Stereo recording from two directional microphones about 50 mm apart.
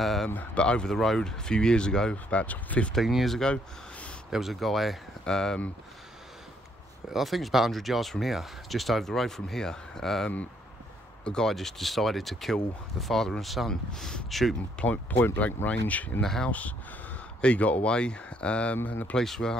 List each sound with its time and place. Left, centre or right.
0.0 s speech: centre
0.6 s speech: centre
2.2 s speech: left
3.0 s speech: centre
5.2 s speech: centre
7.1 s speech: centre
13.7 s speech: centre
14.8 s speech: left
16.2 s speech: centre
16.4 s speech: left
19.1 s speech: centre